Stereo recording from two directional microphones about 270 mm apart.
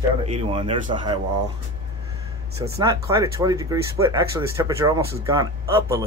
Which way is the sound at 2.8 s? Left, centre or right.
Centre.